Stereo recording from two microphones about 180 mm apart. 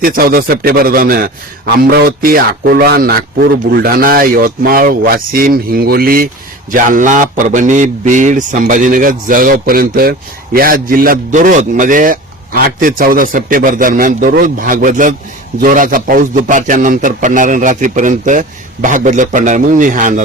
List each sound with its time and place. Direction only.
0.0 s a man's voice: 55° right (ahead or behind)